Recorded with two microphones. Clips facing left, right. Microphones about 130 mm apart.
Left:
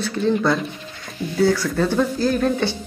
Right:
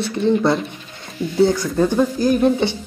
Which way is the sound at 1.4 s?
20° right (ahead or behind).